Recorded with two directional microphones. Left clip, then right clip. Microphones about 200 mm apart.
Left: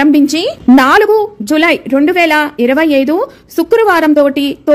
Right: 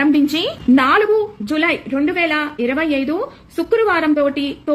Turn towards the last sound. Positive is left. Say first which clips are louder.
# left 8 dB
turn(degrees=50)  # may be behind; listen again after turning